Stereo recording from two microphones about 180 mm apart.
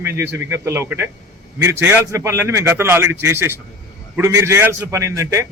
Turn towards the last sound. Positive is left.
turn(degrees=-15)  # may be behind; listen again after turning